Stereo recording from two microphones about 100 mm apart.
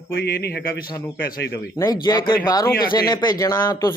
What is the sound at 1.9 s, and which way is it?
Speech, 45° left (ahead or behind).